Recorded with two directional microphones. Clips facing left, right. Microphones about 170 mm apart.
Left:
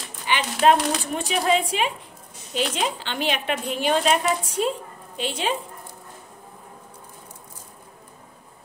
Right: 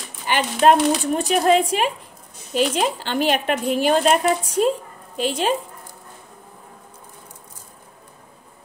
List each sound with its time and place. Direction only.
0.3 s a woman's voice: 45° right (ahead or behind)